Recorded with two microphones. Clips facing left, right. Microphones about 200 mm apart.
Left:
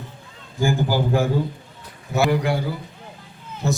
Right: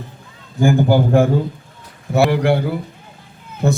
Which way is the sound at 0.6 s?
60° right (ahead or behind).